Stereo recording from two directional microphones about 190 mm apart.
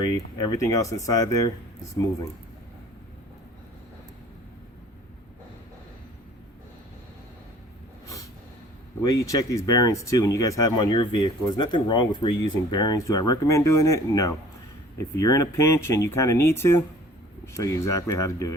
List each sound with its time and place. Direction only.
0.0 s speech: 20° left (ahead or behind)
8.0 s a sound: 15° left (ahead or behind)
9.0 s speech: 15° left (ahead or behind)